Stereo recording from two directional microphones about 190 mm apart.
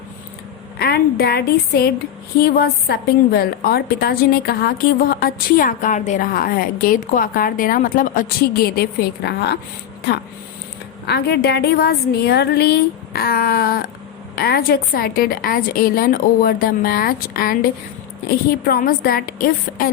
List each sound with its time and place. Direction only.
0.8 s a woman's voice: 55° left (ahead or behind)
11.0 s a woman's voice: 60° left (ahead or behind)